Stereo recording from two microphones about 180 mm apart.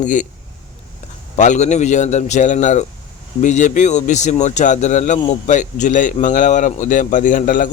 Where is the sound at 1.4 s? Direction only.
40° left (ahead or behind).